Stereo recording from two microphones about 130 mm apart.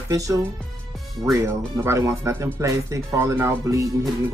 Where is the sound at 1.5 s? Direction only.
20° right (ahead or behind).